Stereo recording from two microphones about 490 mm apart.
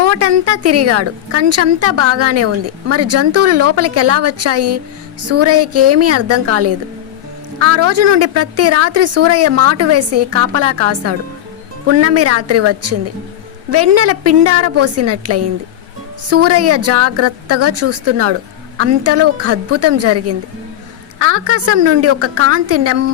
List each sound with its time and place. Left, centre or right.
0.0 s a woman's voice: right